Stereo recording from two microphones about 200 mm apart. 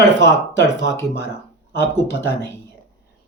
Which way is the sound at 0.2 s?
60° left (ahead or behind).